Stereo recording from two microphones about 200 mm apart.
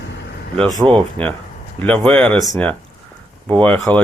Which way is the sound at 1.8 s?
5° left (ahead or behind).